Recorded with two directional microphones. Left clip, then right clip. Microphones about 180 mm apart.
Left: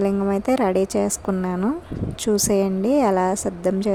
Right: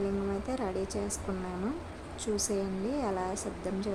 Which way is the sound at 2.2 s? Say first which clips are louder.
Left 13 dB; 50° left (ahead or behind).